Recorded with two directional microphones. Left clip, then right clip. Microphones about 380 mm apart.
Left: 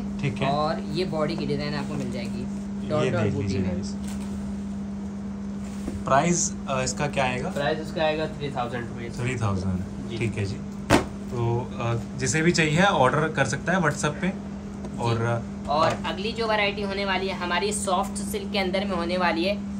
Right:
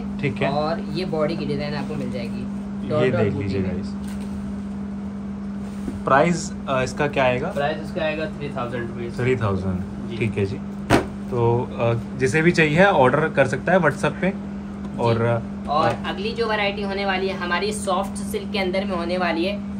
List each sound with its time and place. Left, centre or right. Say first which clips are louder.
0.2 s speech: right 3 dB; centre
2.9 s speech: right 5 dB; centre
6.0 s speech: right 4 dB; centre
7.5 s speech: right 2 dB; left
9.2 s speech: right 8 dB; centre